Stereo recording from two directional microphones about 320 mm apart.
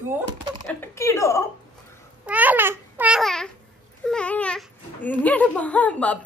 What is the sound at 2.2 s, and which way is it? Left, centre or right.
Babbling, centre.